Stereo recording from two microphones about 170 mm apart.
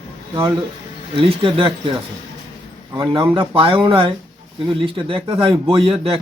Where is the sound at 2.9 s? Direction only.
25° right (ahead or behind).